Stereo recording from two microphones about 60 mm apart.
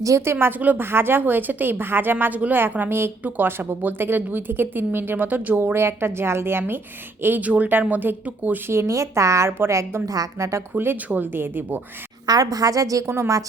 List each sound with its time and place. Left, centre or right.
0.3 s a woman's voice: right
0.6 s a woman's voice: right
0.9 s a woman's voice: right
5.5 s a woman's voice: right
8.9 s a woman's voice: right
9.5 s a woman's voice: right
10.1 s a woman's voice: right
10.8 s a woman's voice: right
12.2 s a woman's voice: right
13.1 s a woman's voice: right